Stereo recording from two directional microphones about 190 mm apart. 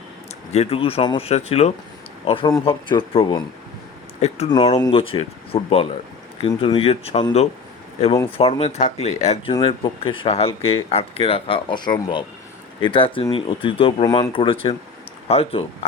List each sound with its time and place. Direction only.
0.5 s speech: 30° left (ahead or behind)
9.5 s speech: 25° left (ahead or behind)